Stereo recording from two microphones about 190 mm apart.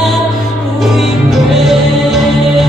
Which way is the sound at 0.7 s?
Centre (ahead or behind).